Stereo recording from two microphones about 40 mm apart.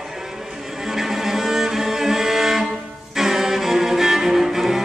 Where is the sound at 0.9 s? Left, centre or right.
Centre.